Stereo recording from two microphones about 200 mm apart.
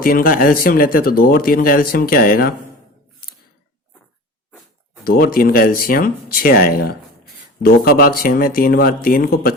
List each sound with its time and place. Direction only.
0.0 s speech: 45° left (ahead or behind)
5.0 s speech: 45° left (ahead or behind)